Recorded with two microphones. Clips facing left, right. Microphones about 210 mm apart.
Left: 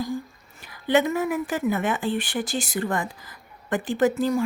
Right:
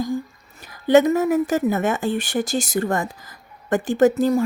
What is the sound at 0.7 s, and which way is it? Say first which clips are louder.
A woman's voice: right 6 dB; 40° right (ahead or behind).